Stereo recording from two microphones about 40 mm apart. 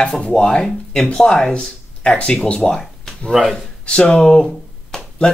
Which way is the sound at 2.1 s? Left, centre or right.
Left.